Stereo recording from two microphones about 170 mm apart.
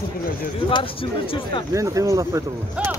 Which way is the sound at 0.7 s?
30° left (ahead or behind).